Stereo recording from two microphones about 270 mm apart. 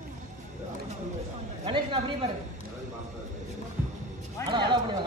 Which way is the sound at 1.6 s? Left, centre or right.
Centre.